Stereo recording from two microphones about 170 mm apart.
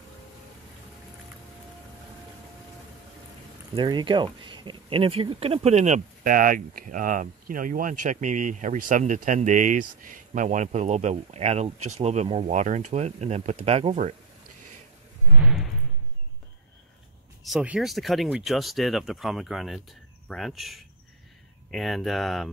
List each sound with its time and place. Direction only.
3.7 s speech: 25° right (ahead or behind); by 14.1 s 40° right (ahead or behind)
15.3 s a sound: 5° right (ahead or behind)
17.5 s speech: 5° right (ahead or behind)